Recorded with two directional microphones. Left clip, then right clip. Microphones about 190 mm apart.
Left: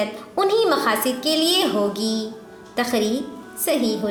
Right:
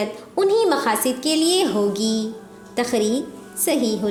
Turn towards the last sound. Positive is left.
turn(degrees=-40)  # may be behind; listen again after turning